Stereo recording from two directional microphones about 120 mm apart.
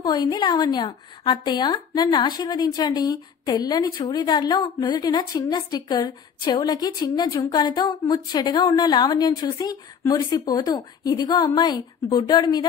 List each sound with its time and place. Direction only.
0.0 s a woman's voice: 35° left (ahead or behind)